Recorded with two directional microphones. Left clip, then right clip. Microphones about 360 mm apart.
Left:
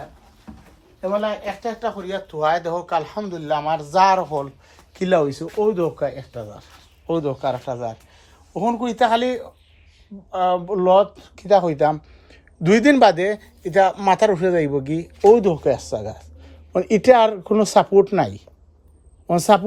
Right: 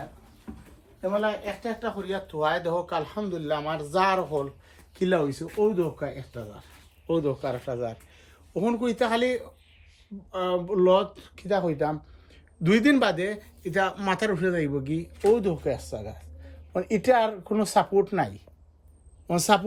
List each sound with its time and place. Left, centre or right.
1.2 s speech: centre
7.1 s speech: centre
10.3 s speech: centre
19.3 s a woman's voice: centre